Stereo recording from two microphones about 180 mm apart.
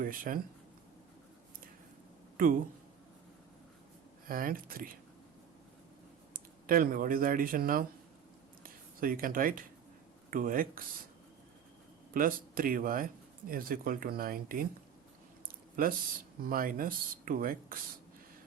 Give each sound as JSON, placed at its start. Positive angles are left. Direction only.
{"t": 0.0, "sound": "speech", "side_deg": -50}
{"t": 2.4, "sound": "speech", "side_deg": -50}
{"t": 4.3, "sound": "speech", "side_deg": -50}
{"t": 6.3, "sound": "speech", "side_deg": -50}
{"t": 12.1, "sound": "speech", "side_deg": -50}
{"t": 16.4, "sound": "speech", "side_deg": -50}